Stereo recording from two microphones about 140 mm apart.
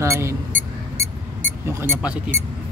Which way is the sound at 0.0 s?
20° right (ahead or behind).